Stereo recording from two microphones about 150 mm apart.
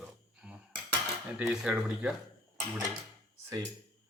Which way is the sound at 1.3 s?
5° right (ahead or behind).